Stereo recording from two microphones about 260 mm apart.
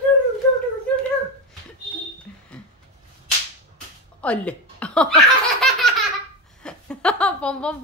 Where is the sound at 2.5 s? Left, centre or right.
Centre.